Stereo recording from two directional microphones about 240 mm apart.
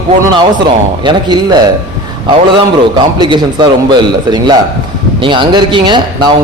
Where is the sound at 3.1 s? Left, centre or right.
Centre.